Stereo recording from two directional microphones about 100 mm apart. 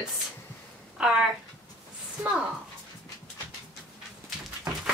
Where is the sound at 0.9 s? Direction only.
10° right (ahead or behind).